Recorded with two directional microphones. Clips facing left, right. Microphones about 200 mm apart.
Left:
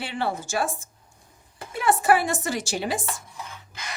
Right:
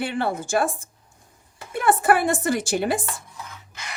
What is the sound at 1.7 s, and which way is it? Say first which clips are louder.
A woman's voice: right 2 dB; 55° right (ahead or behind).